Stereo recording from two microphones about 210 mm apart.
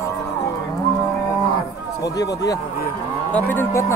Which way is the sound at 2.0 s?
15° left (ahead or behind).